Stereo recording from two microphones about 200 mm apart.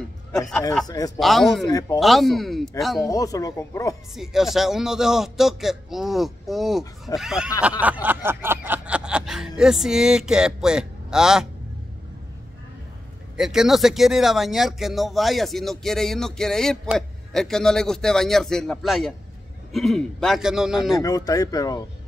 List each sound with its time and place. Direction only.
0.8 s speech: 20° left (ahead or behind)
1.2 s speech: centre (ahead or behind)
1.7 s speech: 20° left (ahead or behind)
2.0 s speech: centre (ahead or behind)
3.1 s speech: 15° left (ahead or behind)
4.1 s speech: centre (ahead or behind)
13.4 s speech: centre (ahead or behind)
21.0 s speech: 20° left (ahead or behind)